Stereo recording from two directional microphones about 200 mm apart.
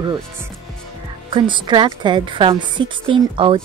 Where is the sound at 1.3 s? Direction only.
25° right (ahead or behind).